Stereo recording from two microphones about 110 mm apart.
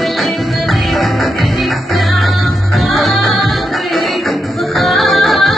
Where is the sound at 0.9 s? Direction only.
Centre (ahead or behind).